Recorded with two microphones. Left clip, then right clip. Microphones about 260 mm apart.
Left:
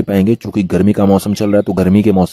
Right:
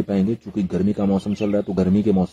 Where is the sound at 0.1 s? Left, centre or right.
Left.